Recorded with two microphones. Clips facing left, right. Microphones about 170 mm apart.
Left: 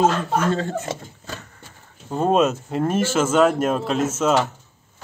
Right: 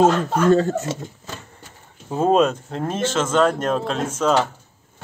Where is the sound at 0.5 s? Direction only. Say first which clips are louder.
Right 7 dB; 45° right (ahead or behind).